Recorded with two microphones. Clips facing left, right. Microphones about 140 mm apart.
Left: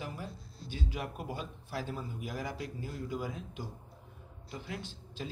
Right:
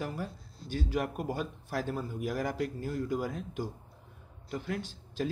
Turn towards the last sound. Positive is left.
turn(degrees=-50)  # may be behind; listen again after turning